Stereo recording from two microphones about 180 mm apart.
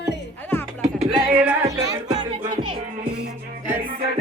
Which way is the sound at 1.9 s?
25° right (ahead or behind).